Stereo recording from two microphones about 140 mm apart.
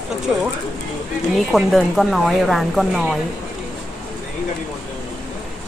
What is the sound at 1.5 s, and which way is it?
Speech, centre (ahead or behind).